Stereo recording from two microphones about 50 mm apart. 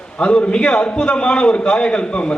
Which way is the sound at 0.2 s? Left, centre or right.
Left.